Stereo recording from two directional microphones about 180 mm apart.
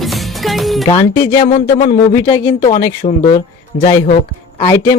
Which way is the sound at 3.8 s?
40° left (ahead or behind).